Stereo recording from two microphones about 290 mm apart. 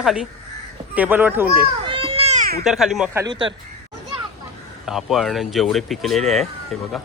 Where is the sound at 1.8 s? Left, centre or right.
Centre.